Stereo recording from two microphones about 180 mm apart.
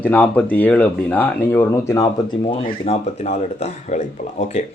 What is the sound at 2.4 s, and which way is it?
Speech, 30° left (ahead or behind).